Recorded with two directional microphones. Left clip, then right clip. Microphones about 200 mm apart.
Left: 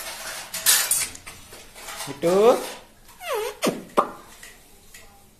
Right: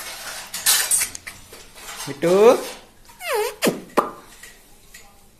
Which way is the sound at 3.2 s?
30° right (ahead or behind).